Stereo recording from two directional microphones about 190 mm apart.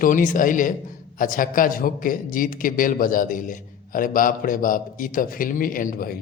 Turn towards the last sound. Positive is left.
turn(degrees=45)  # may be behind; listen again after turning